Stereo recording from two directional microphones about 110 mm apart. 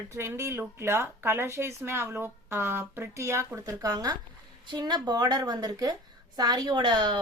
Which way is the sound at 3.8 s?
35° right (ahead or behind).